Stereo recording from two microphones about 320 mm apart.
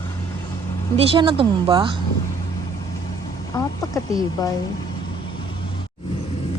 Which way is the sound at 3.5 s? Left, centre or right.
Centre.